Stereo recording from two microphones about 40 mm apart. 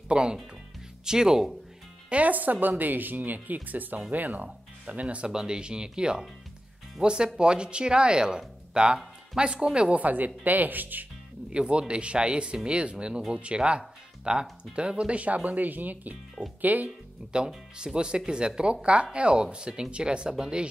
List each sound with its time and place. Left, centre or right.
0.1 s speech: right
2.0 s speech: right
5.3 s speech: centre
9.9 s speech: right
11.5 s speech: right
17.3 s speech: centre